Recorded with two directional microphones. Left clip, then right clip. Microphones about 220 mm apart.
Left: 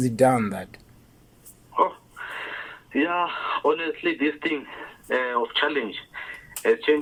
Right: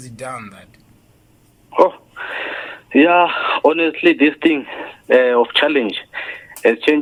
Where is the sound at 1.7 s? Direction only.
55° right (ahead or behind).